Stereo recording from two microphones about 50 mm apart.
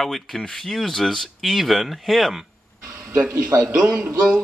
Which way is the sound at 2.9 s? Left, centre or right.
Right.